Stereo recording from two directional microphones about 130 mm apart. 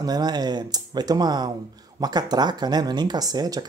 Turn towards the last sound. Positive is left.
turn(degrees=-30)  # may be behind; listen again after turning